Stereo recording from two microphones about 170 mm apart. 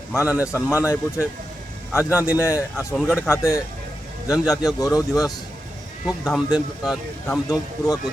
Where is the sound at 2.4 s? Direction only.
15° left (ahead or behind).